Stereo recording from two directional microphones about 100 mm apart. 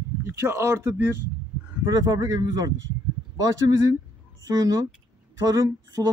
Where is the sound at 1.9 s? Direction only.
40° right (ahead or behind).